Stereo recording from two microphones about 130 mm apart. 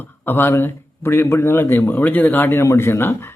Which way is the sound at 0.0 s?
15° left (ahead or behind).